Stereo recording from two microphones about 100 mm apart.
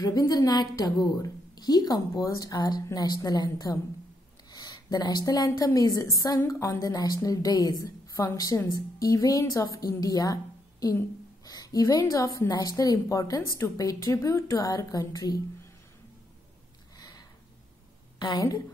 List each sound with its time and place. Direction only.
0.0 s a woman's voice: 40° left (ahead or behind)
18.2 s a woman's voice: 45° left (ahead or behind)